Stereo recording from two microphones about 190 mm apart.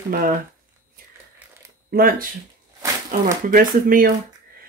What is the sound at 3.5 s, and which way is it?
Speech, 45° right (ahead or behind).